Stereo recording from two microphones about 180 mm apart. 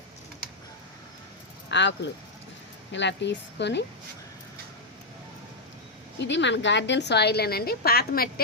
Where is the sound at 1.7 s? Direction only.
75° left (ahead or behind).